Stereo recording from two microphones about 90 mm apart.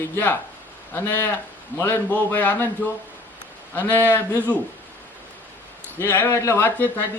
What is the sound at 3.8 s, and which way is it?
Speech, 20° left (ahead or behind).